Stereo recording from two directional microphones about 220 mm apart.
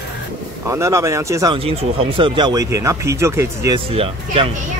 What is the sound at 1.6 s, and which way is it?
Speech, 25° right (ahead or behind).